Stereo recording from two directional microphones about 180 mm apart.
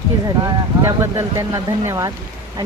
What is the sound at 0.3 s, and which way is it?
Speech, 20° right (ahead or behind).